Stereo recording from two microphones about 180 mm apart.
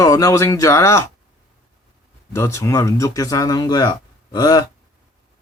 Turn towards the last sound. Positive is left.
turn(degrees=20)  # may be behind; listen again after turning